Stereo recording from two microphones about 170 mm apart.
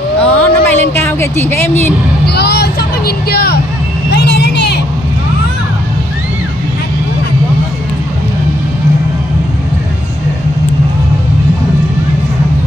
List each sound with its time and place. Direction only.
0.2 s a sound: 10° left (ahead or behind)
2.2 s music: 75° left (ahead or behind)
4.1 s music: 80° left